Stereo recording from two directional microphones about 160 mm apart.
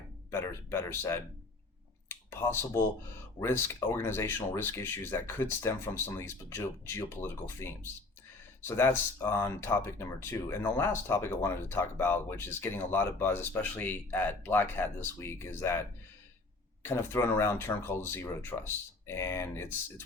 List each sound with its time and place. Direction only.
0.3 s speech: 15° left (ahead or behind)
2.0 s a sound: 15° left (ahead or behind)
3.4 s speech: 15° left (ahead or behind)
16.8 s speech: 15° left (ahead or behind)